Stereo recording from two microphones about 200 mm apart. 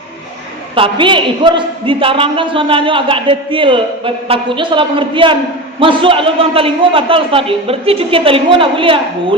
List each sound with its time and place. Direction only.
0.8 s a man's voice: 25° right (ahead or behind)